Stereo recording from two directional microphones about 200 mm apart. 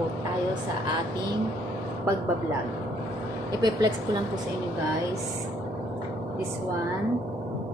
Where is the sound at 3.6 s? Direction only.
20° right (ahead or behind).